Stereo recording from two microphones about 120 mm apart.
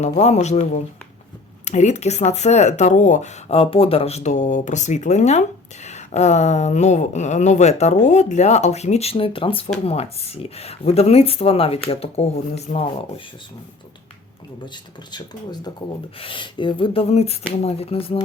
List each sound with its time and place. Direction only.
0.0 s speech: 70° left (ahead or behind)
3.6 s speech: 50° left (ahead or behind)
15.1 s speech: 35° left (ahead or behind); by 18.2 s 55° left (ahead or behind)